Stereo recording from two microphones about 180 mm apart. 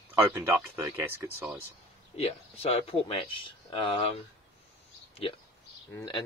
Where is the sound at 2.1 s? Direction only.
35° left (ahead or behind).